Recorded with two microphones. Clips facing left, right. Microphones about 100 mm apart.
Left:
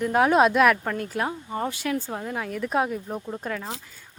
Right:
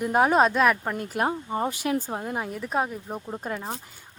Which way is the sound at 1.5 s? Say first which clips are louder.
Right 1 dB; 20° right (ahead or behind).